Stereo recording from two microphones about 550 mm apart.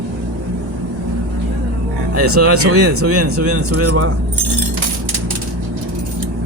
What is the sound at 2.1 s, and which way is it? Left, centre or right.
Speech, right.